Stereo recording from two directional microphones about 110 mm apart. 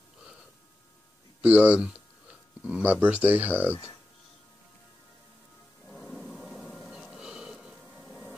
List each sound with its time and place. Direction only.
1.4 s speech: 10° right (ahead or behind)
5.9 s a sound: 5° left (ahead or behind)
6.9 s music: 5° right (ahead or behind)